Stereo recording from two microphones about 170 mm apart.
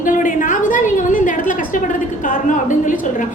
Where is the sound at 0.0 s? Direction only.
50° left (ahead or behind).